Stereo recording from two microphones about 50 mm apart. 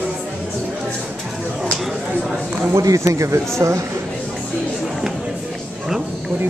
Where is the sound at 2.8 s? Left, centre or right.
Right.